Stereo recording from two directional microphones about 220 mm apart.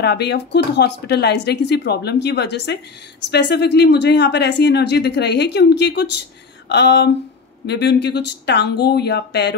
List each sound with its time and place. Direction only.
0.0 s speech: 50° left (ahead or behind)